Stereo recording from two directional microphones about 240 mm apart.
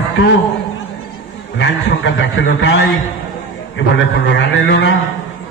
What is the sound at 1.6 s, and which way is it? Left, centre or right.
A man's voice, left.